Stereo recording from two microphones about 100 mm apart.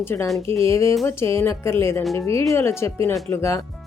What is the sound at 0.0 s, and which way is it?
Speech, 25° left (ahead or behind).